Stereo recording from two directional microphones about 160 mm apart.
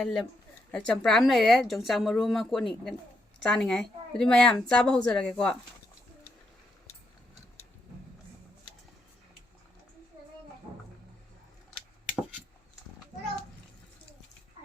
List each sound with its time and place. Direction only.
0.0 s speech: 5° left (ahead or behind)